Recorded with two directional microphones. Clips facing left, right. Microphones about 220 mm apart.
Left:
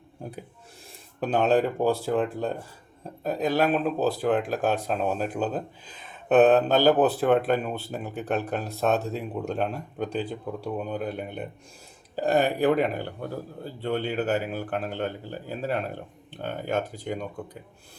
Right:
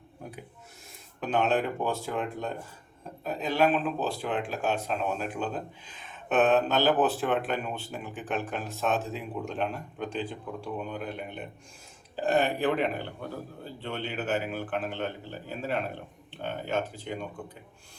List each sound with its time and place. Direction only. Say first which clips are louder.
1.2 s speech: left 4 dB; 35° left (ahead or behind)
16.3 s speech: left 3 dB; 45° left (ahead or behind)